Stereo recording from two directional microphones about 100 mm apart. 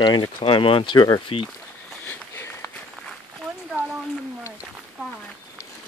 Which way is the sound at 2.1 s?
25° left (ahead or behind).